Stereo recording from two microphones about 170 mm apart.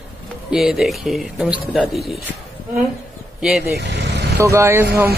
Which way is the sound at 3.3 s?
5° right (ahead or behind).